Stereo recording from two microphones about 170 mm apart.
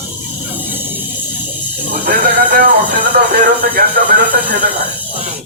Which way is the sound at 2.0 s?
60° right (ahead or behind).